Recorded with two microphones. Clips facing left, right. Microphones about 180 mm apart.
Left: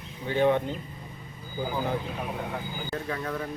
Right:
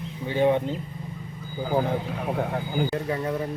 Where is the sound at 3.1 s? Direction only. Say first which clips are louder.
Right 5 dB; 20° right (ahead or behind).